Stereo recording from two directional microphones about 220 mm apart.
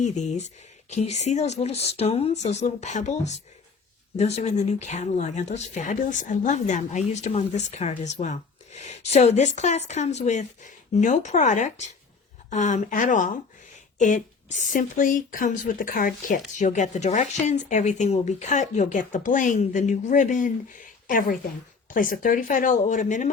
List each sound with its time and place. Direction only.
0.0 s a woman's voice: 35° left (ahead or behind)